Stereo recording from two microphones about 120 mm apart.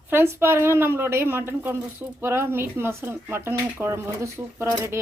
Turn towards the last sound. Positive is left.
turn(degrees=-20)  # may be behind; listen again after turning